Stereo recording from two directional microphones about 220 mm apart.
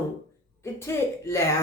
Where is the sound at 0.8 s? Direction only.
10° left (ahead or behind).